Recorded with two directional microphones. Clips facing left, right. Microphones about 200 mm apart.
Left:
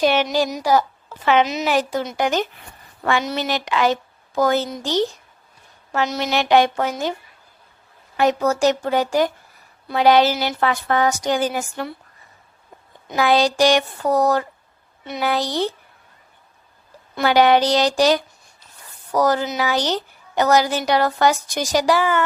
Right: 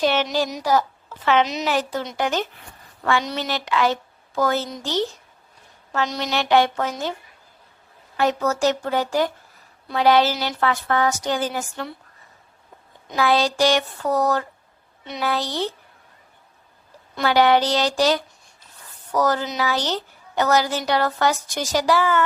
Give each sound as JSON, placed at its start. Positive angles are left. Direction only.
{"t": 0.0, "sound": "a sound", "side_deg": 15}
{"t": 0.6, "sound": "a woman's voice", "side_deg": 10}
{"t": 8.1, "sound": "a woman's voice", "side_deg": 15}
{"t": 13.1, "sound": "a woman's voice", "side_deg": 15}
{"t": 17.2, "sound": "a woman's voice", "side_deg": 15}